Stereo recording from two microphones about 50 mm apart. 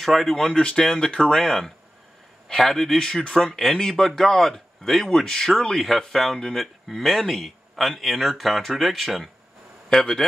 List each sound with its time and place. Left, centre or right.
0.0 s a man's voice: centre